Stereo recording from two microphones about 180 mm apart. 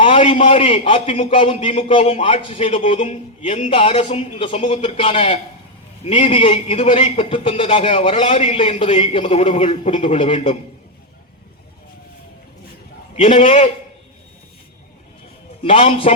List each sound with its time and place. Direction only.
0.0 s a man's voice: 30° left (ahead or behind)
13.1 s a man's voice: 30° left (ahead or behind)
15.6 s a man's voice: 30° left (ahead or behind)